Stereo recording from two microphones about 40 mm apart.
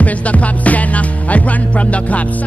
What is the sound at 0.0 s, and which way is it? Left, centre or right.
Music, left.